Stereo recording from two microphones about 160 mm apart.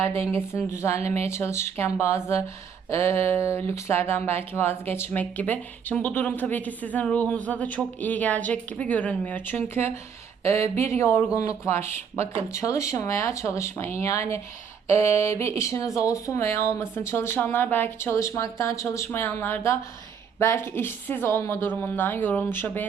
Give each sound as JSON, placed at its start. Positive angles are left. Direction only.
{"t": 0.8, "sound": "speech", "side_deg": 15}